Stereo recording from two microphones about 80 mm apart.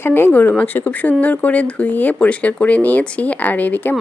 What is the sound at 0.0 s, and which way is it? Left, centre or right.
Speech, left.